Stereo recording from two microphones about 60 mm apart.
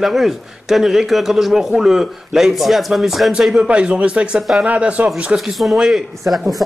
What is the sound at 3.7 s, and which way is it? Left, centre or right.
Speech, centre.